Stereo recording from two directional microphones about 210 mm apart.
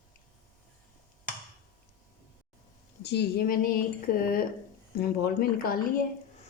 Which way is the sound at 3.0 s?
50° left (ahead or behind).